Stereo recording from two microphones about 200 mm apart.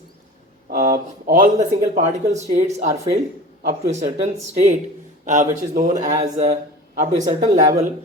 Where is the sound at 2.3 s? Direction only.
35° right (ahead or behind).